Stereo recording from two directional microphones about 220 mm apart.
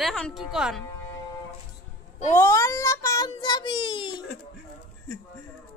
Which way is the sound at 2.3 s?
10° left (ahead or behind).